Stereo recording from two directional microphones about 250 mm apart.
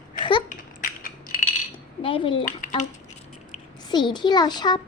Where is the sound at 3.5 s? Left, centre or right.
Centre.